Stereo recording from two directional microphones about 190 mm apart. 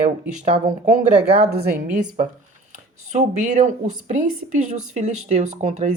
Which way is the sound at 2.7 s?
40° right (ahead or behind).